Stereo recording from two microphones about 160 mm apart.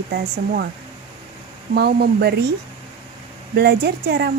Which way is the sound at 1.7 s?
85° right.